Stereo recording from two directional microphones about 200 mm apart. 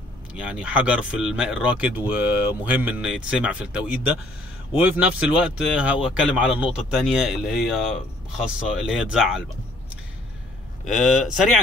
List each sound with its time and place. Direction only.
0.3 s speech: 5° right (ahead or behind)
10.9 s speech: centre (ahead or behind)